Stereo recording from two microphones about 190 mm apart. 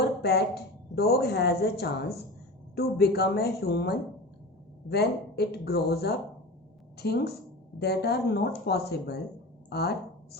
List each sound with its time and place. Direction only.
0.0 s speech: 60° left (ahead or behind)